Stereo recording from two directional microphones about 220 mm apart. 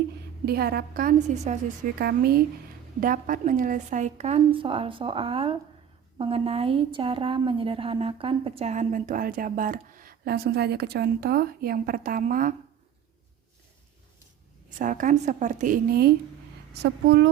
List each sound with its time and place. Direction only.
0.4 s a woman's voice: 45° right (ahead or behind)
2.0 s a woman's voice: 45° right (ahead or behind)
14.8 s a woman's voice: 35° right (ahead or behind)